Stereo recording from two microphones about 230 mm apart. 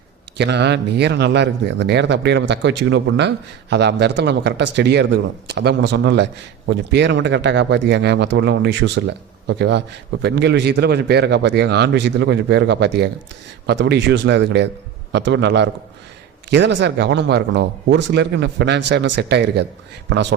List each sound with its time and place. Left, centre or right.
0.3 s speech: right